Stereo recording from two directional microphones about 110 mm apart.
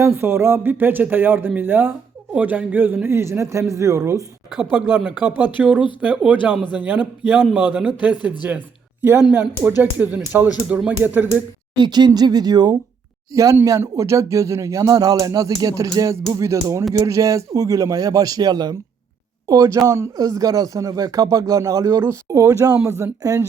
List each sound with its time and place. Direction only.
0.0 s speech: 25° right (ahead or behind)
4.7 s speech: 15° right (ahead or behind)
11.8 s speech: 40° right (ahead or behind)